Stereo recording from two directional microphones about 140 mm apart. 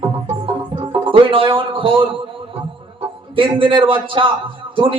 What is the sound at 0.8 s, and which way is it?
Speech, 40° right (ahead or behind).